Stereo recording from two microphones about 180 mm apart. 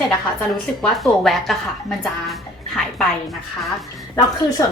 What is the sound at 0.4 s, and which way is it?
A woman's voice, centre (ahead or behind).